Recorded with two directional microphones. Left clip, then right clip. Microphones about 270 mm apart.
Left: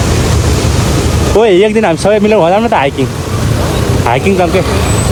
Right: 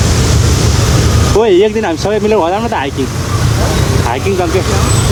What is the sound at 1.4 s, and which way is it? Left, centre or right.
Speech, right.